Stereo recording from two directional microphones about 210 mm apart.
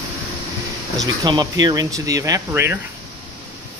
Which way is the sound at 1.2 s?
20° right (ahead or behind).